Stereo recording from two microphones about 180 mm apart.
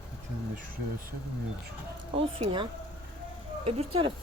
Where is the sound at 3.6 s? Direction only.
30° right (ahead or behind).